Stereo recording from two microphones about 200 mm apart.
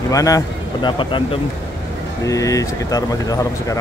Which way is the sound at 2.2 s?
15° left (ahead or behind).